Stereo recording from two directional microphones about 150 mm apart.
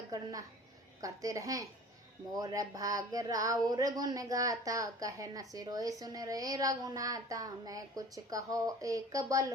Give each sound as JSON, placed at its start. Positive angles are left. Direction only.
{"t": 0.1, "sound": "a woman's voice", "side_deg": -25}